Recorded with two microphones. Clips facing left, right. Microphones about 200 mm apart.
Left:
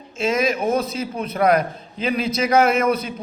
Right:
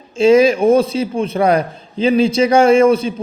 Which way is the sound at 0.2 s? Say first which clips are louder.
Right 10 dB; 30° right (ahead or behind).